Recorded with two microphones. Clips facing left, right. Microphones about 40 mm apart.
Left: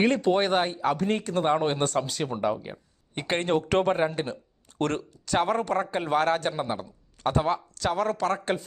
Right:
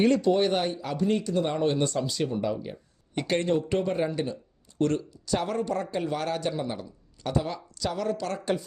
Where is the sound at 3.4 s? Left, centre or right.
Left.